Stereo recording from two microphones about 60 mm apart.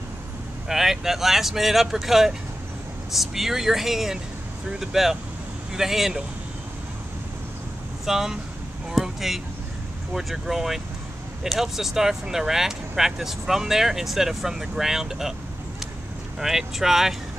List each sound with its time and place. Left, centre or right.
0.7 s speech: centre
8.0 s speech: centre
16.3 s speech: centre